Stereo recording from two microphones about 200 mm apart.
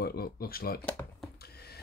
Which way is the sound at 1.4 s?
50° left (ahead or behind).